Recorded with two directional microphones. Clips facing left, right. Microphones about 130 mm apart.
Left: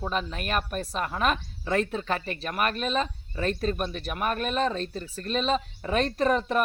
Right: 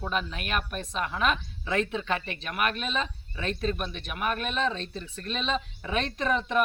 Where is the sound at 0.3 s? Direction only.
40° left (ahead or behind).